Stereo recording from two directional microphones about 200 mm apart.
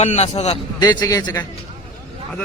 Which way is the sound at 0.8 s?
20° left (ahead or behind).